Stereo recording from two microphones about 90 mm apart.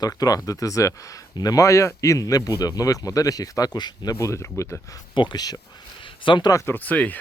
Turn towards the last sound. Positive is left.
turn(degrees=15)  # may be behind; listen again after turning